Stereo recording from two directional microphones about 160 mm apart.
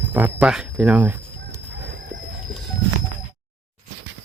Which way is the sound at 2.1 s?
55° right (ahead or behind).